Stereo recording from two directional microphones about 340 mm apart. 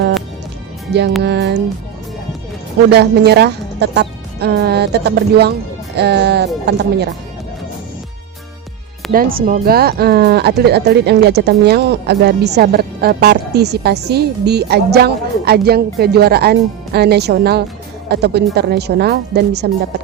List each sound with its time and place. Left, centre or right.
1.2 s speech: right
2.9 s speech: right
9.1 s speech: right